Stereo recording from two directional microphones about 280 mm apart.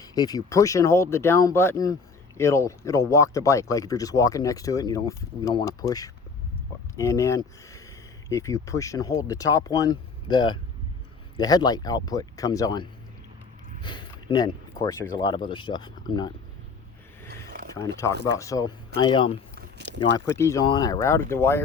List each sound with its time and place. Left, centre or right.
0.0 s speech: centre
17.7 s speech: centre
19.5 s a sound: right
20.0 s speech: centre